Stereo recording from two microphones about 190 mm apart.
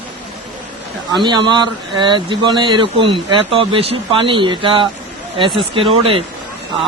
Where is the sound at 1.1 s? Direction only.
25° right (ahead or behind).